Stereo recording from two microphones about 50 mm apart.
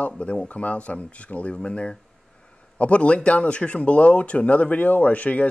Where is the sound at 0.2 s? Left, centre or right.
Left.